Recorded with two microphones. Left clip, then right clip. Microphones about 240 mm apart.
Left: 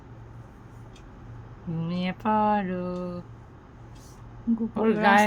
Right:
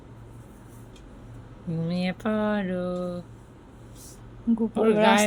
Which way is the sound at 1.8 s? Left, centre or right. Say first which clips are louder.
Even; centre.